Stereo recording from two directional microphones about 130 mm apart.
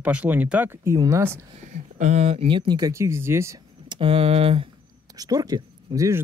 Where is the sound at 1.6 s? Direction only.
65° right (ahead or behind).